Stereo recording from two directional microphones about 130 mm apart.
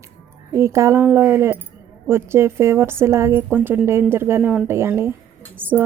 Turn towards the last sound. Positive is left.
turn(degrees=-15)  # may be behind; listen again after turning